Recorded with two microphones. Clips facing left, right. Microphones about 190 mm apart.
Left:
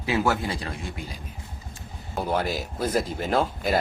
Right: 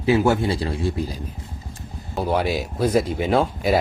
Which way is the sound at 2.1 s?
5° right (ahead or behind).